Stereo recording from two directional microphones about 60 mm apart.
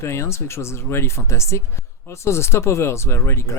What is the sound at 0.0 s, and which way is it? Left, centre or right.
Speech, left.